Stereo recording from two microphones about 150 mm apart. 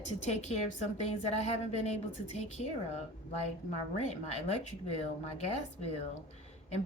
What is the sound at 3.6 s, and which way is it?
A woman's voice, 45° left (ahead or behind).